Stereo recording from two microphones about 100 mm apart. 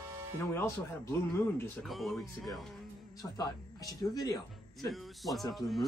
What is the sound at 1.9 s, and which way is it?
Speech, centre (ahead or behind).